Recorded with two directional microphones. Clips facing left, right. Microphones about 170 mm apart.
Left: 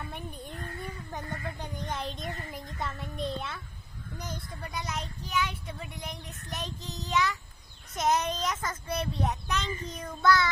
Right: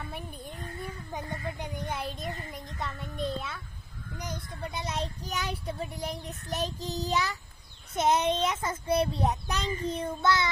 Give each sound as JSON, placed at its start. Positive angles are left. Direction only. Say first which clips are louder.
{"t": 0.0, "sound": "a sound", "louder": "even", "side_deg": 0}
{"t": 1.5, "sound": "child singing", "louder": "right 1 dB", "side_deg": -10}
{"t": 4.2, "sound": "a child's voice", "louder": "right 3 dB", "side_deg": -15}
{"t": 5.2, "sound": "child singing", "louder": "left 1 dB", "side_deg": -40}
{"t": 7.9, "sound": "a child's voice", "louder": "right 3 dB", "side_deg": -30}